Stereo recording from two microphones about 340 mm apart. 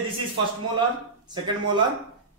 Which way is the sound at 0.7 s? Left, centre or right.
Centre.